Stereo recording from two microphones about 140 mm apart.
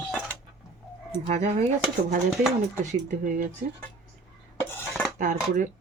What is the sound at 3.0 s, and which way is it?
Speech, 75° right (ahead or behind).